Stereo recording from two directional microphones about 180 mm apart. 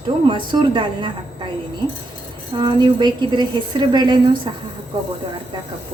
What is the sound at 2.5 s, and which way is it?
A woman's voice, 25° right (ahead or behind).